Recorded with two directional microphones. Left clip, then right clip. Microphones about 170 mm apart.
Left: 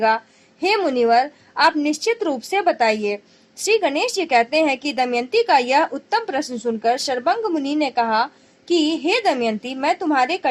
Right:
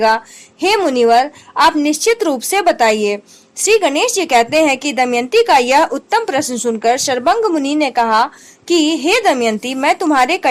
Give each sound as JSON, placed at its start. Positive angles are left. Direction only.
{"t": 0.6, "sound": "a woman's voice", "side_deg": -30}